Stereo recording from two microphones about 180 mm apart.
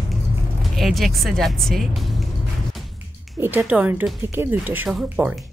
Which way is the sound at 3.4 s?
10° right (ahead or behind).